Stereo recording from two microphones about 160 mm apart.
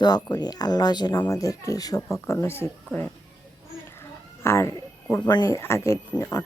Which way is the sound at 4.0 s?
15° left (ahead or behind).